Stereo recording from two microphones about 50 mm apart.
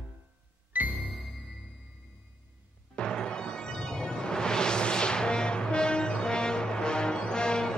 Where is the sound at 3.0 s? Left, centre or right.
Centre.